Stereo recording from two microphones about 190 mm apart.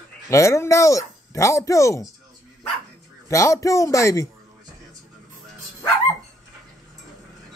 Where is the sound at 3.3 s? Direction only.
15° left (ahead or behind).